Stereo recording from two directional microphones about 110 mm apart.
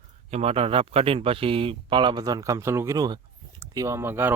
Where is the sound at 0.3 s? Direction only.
75° right (ahead or behind).